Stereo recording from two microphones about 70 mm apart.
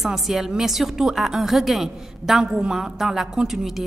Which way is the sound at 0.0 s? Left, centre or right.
Centre.